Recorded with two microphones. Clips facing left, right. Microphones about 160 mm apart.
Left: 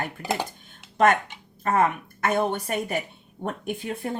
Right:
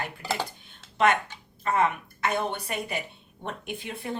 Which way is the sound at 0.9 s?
45° left (ahead or behind).